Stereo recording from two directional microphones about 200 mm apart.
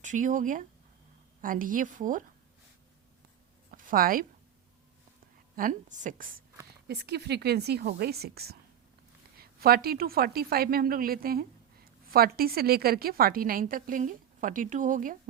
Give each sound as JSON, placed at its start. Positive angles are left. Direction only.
{"t": 0.0, "sound": "a woman's voice", "side_deg": -40}
{"t": 3.7, "sound": "a sound", "side_deg": -45}
{"t": 5.5, "sound": "a woman's voice", "side_deg": -40}
{"t": 6.7, "sound": "a woman's voice", "side_deg": -55}